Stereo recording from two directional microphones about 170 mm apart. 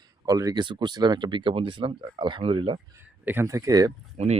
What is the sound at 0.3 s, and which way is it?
Speech, 20° right (ahead or behind).